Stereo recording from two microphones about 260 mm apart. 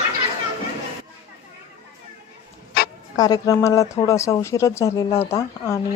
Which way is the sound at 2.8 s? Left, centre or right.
Left.